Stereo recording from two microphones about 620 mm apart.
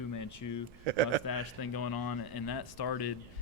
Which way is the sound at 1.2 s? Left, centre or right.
Left.